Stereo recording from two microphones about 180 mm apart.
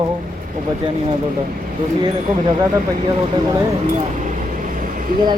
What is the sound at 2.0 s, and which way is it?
Speech, 25° right (ahead or behind).